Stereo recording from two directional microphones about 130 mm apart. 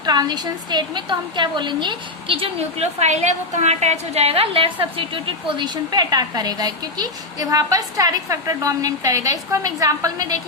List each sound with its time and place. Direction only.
0.0 s a woman's voice: 30° right (ahead or behind)